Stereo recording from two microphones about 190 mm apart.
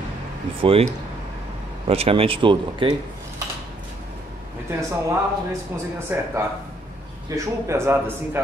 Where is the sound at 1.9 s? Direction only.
30° right (ahead or behind).